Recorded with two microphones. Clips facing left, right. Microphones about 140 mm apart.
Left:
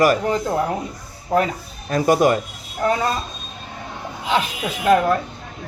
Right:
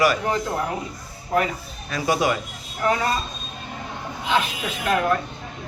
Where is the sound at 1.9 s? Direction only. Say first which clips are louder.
Left 6 dB; 45° left (ahead or behind).